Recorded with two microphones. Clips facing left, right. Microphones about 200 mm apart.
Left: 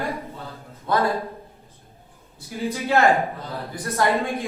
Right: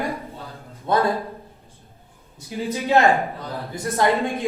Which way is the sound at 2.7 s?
15° right (ahead or behind).